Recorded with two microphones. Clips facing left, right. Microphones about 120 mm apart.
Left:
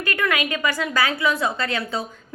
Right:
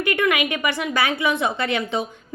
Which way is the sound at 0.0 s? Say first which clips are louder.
Right 3 dB; 20° right (ahead or behind).